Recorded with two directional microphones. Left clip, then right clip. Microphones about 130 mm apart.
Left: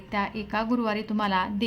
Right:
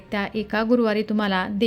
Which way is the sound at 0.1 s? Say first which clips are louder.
Right 3 dB; 35° right (ahead or behind).